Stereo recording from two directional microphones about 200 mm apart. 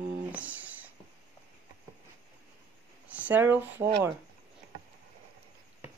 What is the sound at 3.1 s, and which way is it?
Speech, 5° right (ahead or behind).